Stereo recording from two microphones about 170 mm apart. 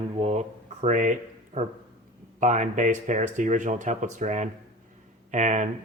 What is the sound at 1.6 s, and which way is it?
Speech, 40° right (ahead or behind).